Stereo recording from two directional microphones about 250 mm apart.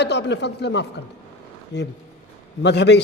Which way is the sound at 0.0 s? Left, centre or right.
Left.